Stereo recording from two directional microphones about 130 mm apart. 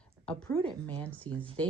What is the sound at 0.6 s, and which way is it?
Speech, 10° left (ahead or behind).